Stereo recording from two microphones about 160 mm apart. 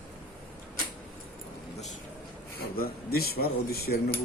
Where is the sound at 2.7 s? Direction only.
70° left (ahead or behind).